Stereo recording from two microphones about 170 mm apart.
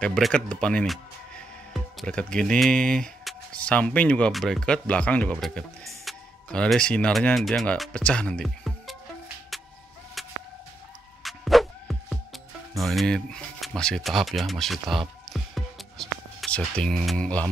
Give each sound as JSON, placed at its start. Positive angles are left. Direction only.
{"t": 0.0, "sound": "speech", "side_deg": 5}
{"t": 9.5, "sound": "vehicle", "side_deg": 0}
{"t": 10.2, "sound": "chicken", "side_deg": 0}
{"t": 11.2, "sound": "music", "side_deg": 0}